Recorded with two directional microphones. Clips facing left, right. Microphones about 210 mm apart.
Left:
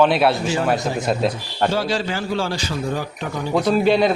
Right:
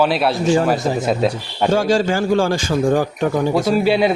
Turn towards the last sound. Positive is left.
turn(degrees=-10)  # may be behind; listen again after turning